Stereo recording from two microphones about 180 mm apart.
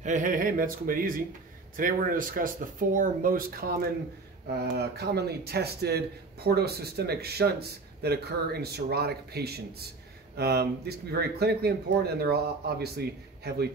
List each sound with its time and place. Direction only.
0.0 s speech: 45° right (ahead or behind)
4.5 s speech: 65° right (ahead or behind)